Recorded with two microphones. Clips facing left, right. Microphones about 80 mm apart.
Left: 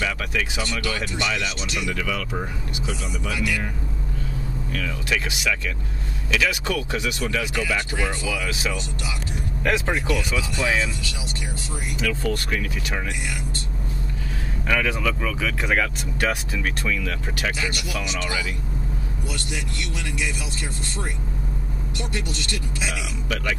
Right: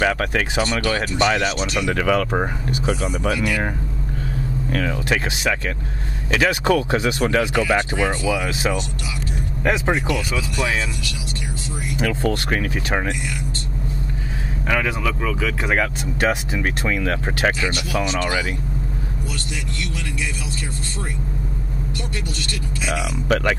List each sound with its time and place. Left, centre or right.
0.0 s speech: right
4.6 s speech: right
9.7 s speech: right
12.0 s speech: right
14.7 s speech: centre
16.5 s speech: right
17.6 s speech: right
23.2 s speech: right